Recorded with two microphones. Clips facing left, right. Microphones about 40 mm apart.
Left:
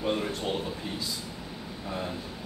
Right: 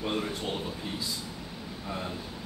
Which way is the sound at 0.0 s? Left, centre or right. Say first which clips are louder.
Left 2 dB; centre.